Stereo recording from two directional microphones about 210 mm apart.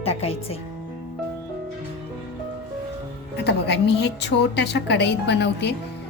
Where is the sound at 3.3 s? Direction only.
55° left (ahead or behind).